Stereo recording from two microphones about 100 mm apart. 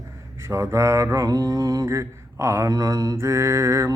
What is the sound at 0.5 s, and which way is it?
Mantra, 30° right (ahead or behind).